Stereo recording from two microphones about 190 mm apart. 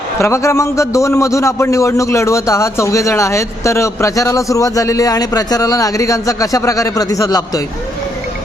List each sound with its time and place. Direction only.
0.2 s a man's voice: 15° left (ahead or behind)